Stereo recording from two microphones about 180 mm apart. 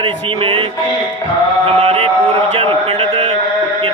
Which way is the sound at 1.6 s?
35° right (ahead or behind).